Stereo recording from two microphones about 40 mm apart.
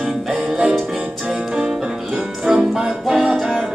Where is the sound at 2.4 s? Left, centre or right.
Centre.